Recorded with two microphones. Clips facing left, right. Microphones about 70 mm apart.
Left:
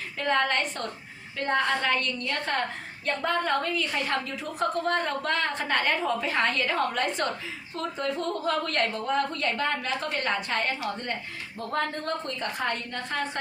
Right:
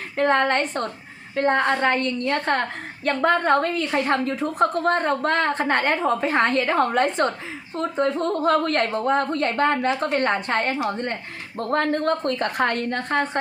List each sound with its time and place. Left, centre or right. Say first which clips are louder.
0.2 s a woman's voice: right 6 dB; right